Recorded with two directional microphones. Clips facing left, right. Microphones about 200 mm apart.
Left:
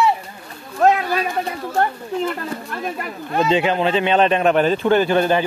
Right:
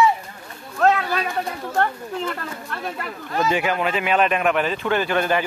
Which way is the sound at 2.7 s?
15° left (ahead or behind).